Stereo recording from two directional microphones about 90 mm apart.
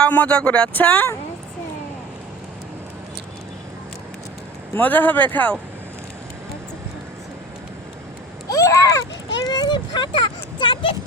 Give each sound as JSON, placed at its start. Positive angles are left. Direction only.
{"t": 0.0, "sound": "speech", "side_deg": 15}
{"t": 4.7, "sound": "speech", "side_deg": 20}
{"t": 8.4, "sound": "a child's voice", "side_deg": 40}
{"t": 9.5, "sound": "speech", "side_deg": 55}